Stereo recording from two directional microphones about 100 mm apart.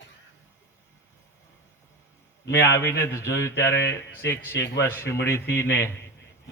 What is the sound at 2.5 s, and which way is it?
Speech, 30° left (ahead or behind).